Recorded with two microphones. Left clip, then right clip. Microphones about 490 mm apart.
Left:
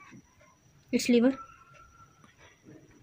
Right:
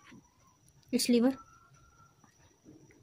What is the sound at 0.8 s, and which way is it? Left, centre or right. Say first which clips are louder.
Speech: left 3 dB; right.